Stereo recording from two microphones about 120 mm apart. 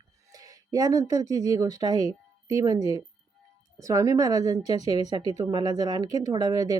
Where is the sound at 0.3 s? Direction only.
30° right (ahead or behind).